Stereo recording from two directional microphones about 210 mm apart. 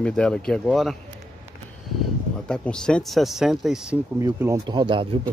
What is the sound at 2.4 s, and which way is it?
Speech, 5° left (ahead or behind).